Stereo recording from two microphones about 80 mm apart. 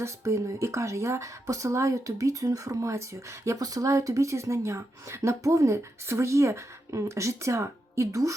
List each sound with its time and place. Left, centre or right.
0.0 s speech: right
3.6 s speech: right